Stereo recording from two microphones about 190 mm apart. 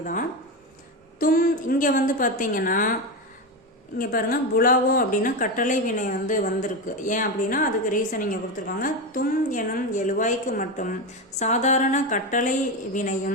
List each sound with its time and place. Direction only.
0.0 s a woman's voice: 45° left (ahead or behind)
3.9 s a woman's voice: 50° left (ahead or behind)